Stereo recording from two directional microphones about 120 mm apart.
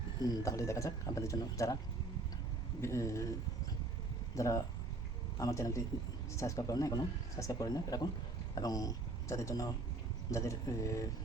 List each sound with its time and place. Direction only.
0.2 s speech: 30° left (ahead or behind)
2.8 s speech: 25° left (ahead or behind)
4.4 s speech: 25° left (ahead or behind)